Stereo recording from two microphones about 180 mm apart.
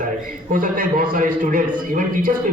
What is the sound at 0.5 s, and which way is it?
A man's voice, 50° right (ahead or behind).